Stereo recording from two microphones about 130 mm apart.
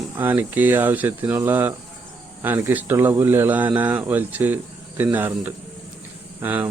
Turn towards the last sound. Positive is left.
turn(degrees=-15)  # may be behind; listen again after turning